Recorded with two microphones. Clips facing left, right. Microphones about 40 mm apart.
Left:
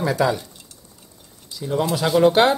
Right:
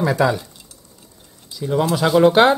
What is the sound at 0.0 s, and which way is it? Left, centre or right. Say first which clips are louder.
Speech: right 2 dB; centre.